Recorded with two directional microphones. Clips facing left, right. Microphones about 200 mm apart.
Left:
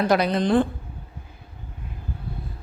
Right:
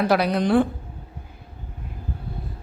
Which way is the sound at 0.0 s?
5° right (ahead or behind).